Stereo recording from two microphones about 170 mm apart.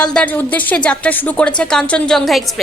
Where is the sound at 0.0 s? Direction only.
5° left (ahead or behind).